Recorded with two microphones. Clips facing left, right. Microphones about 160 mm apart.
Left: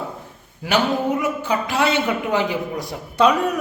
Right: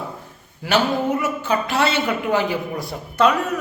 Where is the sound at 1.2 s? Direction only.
15° left (ahead or behind).